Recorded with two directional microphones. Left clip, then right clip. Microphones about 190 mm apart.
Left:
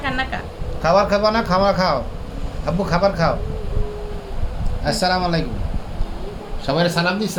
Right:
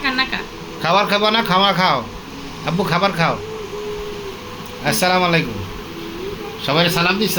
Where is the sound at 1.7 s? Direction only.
25° right (ahead or behind).